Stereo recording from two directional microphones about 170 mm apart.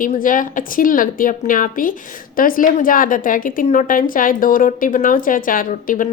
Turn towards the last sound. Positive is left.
turn(degrees=55)  # may be behind; listen again after turning